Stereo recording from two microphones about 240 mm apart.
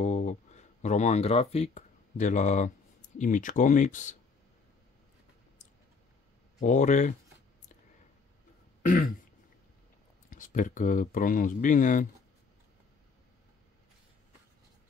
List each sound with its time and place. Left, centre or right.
0.0 s speech: left
6.6 s speech: left
8.8 s throat clearing: left
10.3 s speech: left